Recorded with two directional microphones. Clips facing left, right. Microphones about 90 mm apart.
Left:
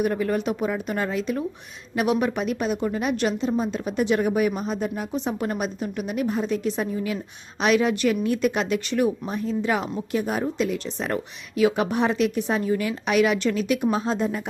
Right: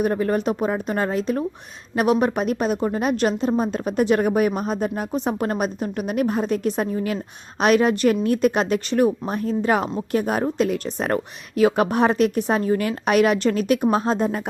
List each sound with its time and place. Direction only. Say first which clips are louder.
0.0 s speech: right 3 dB; 40° right (ahead or behind)